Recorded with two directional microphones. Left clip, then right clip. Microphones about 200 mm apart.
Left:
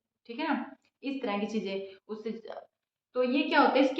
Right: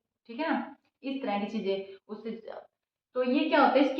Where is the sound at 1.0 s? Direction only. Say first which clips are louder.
Right 1 dB; 35° left (ahead or behind).